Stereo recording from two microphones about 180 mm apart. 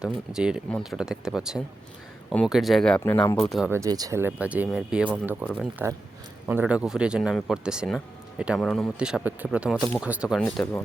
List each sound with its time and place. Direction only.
0.3 s speech: 5° right (ahead or behind)
3.7 s speech: 20° right (ahead or behind); by 10.8 s 5° left (ahead or behind)